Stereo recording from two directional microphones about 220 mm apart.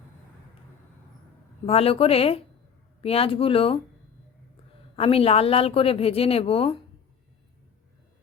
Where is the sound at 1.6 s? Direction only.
25° left (ahead or behind).